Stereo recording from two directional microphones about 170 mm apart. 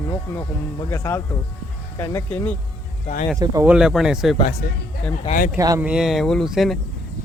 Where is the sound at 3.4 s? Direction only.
20° right (ahead or behind).